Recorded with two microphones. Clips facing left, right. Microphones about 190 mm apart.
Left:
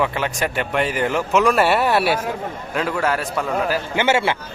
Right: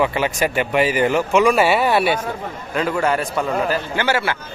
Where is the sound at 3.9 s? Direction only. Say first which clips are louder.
Left 5 dB; 20° left (ahead or behind).